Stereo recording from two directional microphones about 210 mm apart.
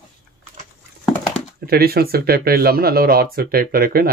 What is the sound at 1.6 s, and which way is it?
Speech, 45° right (ahead or behind).